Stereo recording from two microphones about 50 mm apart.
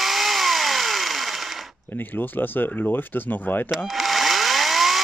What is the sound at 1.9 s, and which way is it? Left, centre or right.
Speech, left.